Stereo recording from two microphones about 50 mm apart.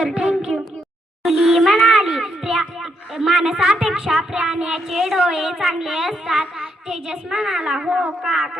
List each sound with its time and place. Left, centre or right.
0.0 s child singing: right
1.2 s speech: centre
2.0 s a sound: centre
3.2 s speech: centre
4.9 s a woman's voice: centre
5.2 s speech: centre
6.6 s child singing: centre
7.3 s speech: centre